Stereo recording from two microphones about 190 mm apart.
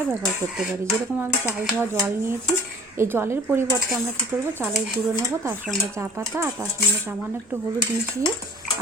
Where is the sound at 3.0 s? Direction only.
10° right (ahead or behind).